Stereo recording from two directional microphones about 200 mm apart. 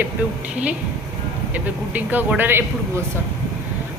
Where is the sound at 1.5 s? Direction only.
10° right (ahead or behind).